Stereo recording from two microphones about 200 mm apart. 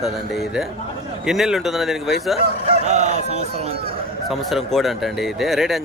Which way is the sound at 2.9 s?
35° right (ahead or behind).